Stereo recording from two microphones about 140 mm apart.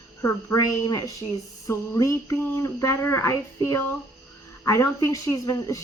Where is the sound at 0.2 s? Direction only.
20° left (ahead or behind).